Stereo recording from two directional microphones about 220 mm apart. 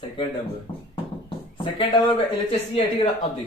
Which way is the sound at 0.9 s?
20° left (ahead or behind).